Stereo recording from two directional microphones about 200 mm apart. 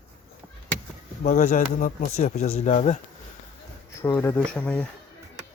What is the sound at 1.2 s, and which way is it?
Speech, 40° left (ahead or behind).